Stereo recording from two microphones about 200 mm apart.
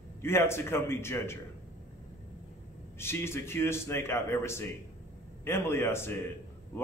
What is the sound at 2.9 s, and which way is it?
A man's voice, 10° left (ahead or behind).